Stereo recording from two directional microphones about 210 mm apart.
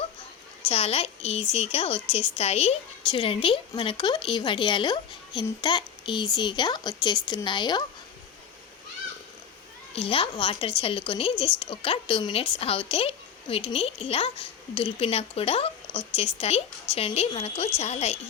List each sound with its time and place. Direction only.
0.7 s a woman's voice: 30° left (ahead or behind)
9.9 s a woman's voice: 25° left (ahead or behind)